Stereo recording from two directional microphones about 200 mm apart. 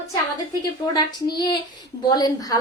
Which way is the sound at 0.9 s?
20° left (ahead or behind).